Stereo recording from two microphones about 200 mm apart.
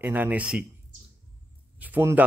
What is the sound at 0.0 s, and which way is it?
Speech, 10° right (ahead or behind).